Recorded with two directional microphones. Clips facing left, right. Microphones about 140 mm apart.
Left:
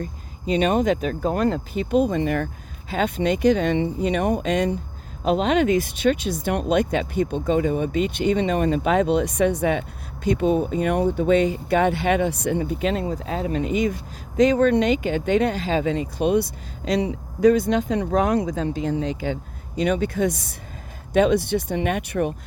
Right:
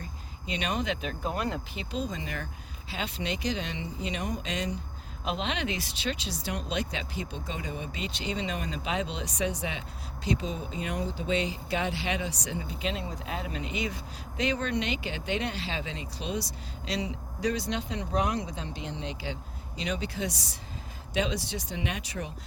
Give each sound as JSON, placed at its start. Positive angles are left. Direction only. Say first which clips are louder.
{"t": 0.0, "sound": "speech", "louder": "left 12 dB", "side_deg": 45}